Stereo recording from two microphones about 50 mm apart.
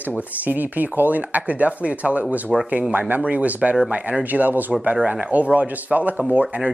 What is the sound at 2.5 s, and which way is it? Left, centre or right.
Speech, centre.